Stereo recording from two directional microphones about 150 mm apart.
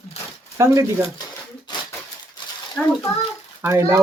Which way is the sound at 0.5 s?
20° right (ahead or behind).